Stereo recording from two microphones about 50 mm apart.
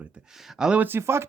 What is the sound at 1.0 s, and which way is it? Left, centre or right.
Speech, right.